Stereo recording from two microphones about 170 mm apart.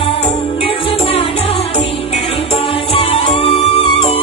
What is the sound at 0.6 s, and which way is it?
Music, 30° left (ahead or behind).